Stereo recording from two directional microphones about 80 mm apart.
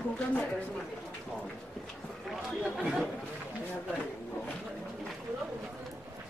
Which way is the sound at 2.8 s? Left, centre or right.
Centre.